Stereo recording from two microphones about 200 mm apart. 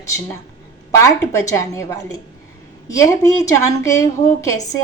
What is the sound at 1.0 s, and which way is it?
A woman's voice, 15° left (ahead or behind).